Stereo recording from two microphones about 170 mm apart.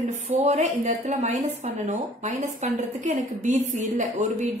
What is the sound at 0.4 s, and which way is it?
A woman's voice, 40° right (ahead or behind).